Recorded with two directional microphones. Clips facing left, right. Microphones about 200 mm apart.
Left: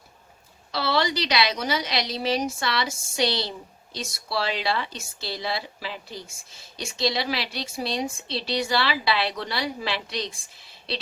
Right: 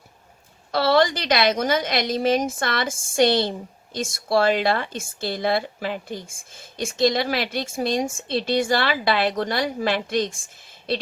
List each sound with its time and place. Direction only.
0.7 s speech: 50° right (ahead or behind)